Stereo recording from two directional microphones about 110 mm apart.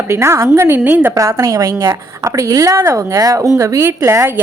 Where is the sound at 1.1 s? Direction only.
30° right (ahead or behind).